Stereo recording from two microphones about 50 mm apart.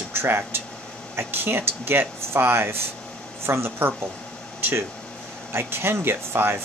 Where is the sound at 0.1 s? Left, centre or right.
Right.